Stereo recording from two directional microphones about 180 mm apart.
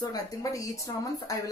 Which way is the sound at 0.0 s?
20° left (ahead or behind).